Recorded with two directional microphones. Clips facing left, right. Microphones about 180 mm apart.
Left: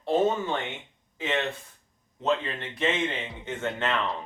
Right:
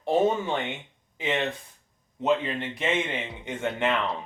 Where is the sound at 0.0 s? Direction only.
15° right (ahead or behind).